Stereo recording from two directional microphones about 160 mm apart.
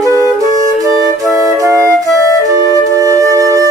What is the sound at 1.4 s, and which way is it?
Flute, 20° right (ahead or behind).